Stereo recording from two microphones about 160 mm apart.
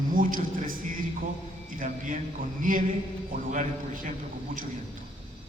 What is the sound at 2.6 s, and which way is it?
Speech, 55° right (ahead or behind).